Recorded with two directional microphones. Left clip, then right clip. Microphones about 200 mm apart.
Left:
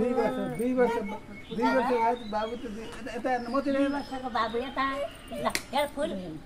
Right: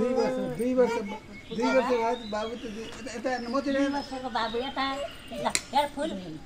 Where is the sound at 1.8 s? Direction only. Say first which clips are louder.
Right 1 dB; 10° left (ahead or behind).